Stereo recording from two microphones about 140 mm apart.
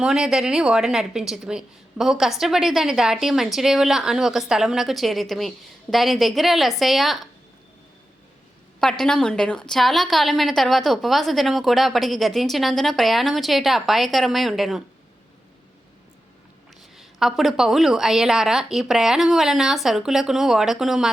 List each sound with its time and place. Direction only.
0.0 s a woman's voice: 5° right (ahead or behind)
8.8 s a woman's voice: 5° left (ahead or behind)
17.0 s a woman's voice: centre (ahead or behind)